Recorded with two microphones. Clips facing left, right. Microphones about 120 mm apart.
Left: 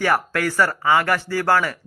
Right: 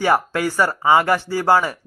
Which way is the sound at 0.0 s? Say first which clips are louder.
Right 2 dB; 20° right (ahead or behind).